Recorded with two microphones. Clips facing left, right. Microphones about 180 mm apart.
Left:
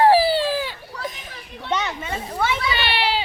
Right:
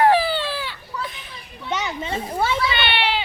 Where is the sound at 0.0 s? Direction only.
30° left (ahead or behind).